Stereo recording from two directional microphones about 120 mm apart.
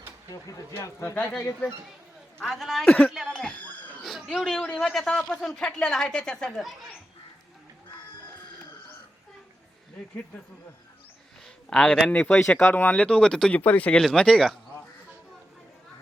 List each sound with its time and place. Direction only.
0.3 s speech: 30° left (ahead or behind)
2.4 s a man's voice: centre (ahead or behind)
3.3 s a sound: 10° left (ahead or behind)
4.0 s a man's voice: centre (ahead or behind)
11.4 s a man's voice: 5° left (ahead or behind)